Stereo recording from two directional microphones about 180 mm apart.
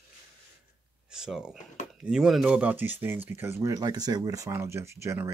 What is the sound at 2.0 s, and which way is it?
Speech, 5° right (ahead or behind).